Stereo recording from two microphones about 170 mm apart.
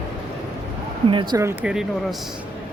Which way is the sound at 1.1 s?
25° right (ahead or behind).